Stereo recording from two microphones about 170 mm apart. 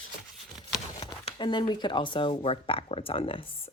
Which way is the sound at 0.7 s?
30° left (ahead or behind).